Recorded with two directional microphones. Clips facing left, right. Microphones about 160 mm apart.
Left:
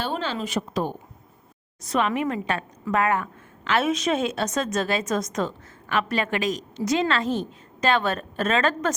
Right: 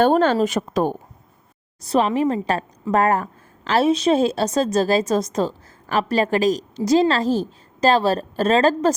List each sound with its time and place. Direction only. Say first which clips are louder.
0.0 s speech: right 12 dB; 50° right (ahead or behind)
1.8 s a woman's voice: right 5 dB; 35° right (ahead or behind)